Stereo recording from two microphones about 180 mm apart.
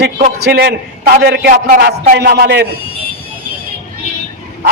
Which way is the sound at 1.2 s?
65° right (ahead or behind).